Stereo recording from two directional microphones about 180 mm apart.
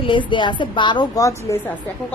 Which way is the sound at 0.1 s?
25° left (ahead or behind).